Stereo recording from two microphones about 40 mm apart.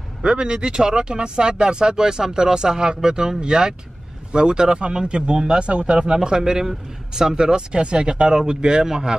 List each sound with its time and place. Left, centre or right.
0.2 s speech: right